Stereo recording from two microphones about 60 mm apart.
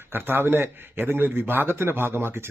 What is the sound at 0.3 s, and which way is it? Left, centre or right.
A man's voice, right.